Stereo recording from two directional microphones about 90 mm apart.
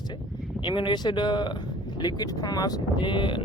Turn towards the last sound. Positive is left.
turn(degrees=60)  # may be behind; listen again after turning